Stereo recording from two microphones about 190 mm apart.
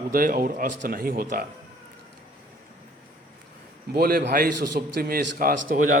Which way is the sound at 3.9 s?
50° right (ahead or behind).